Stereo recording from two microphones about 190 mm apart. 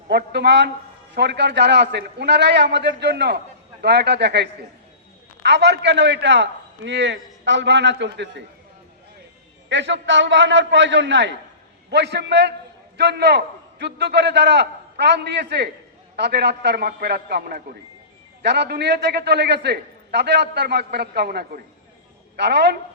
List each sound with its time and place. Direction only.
0.1 s a man's voice: 60° right (ahead or behind)
9.6 s a man's voice: 70° right (ahead or behind)